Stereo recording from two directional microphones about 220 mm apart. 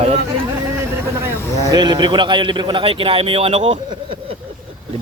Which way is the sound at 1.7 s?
20° right (ahead or behind).